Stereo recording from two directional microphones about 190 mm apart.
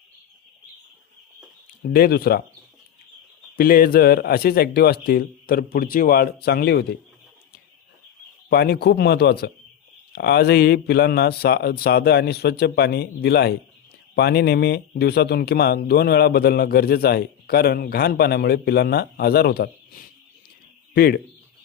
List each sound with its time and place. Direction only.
1.9 s a man's voice: 55° left (ahead or behind)
3.6 s a man's voice: 50° left (ahead or behind)
8.4 s speech: 55° left (ahead or behind)